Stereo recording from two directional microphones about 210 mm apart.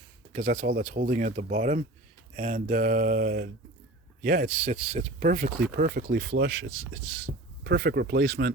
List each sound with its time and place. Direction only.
0.3 s speech: 40° right (ahead or behind)